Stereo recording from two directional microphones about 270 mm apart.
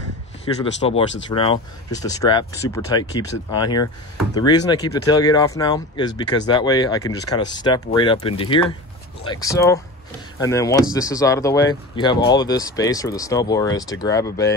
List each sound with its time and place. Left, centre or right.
0.7 s speech: left